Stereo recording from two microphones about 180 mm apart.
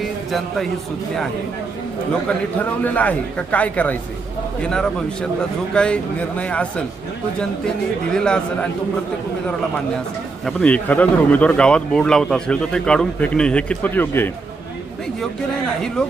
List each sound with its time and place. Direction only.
0.0 s music: centre (ahead or behind)
2.8 s a man's voice: 10° left (ahead or behind)
8.1 s a man's voice: 5° left (ahead or behind)
10.4 s speech: 5° left (ahead or behind)
16.0 s a man's voice: 5° left (ahead or behind)